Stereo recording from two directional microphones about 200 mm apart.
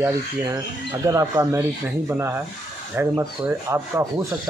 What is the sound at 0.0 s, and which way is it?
Speech, 15° right (ahead or behind).